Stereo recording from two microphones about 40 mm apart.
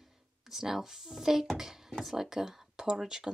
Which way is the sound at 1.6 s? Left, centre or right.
Centre.